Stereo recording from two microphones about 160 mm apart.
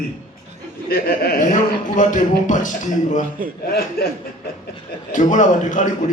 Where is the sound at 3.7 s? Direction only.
75° left (ahead or behind).